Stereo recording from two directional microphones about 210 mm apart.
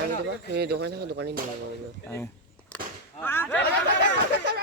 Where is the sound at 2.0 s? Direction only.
10° left (ahead or behind).